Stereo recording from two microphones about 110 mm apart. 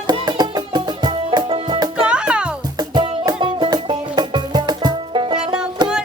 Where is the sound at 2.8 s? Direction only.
40° right (ahead or behind).